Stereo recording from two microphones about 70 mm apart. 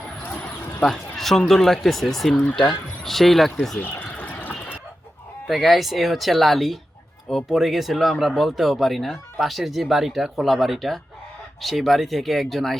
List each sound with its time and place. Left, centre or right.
0.8 s speech: centre
4.0 s a sound: left
5.5 s speech: centre